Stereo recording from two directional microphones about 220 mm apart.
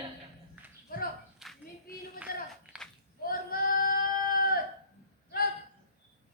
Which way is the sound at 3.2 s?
40° left (ahead or behind).